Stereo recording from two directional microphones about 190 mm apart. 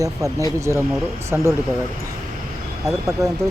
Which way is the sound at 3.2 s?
20° right (ahead or behind).